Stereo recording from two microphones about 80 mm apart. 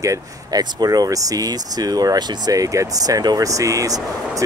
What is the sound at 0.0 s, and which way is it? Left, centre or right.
Speech, right.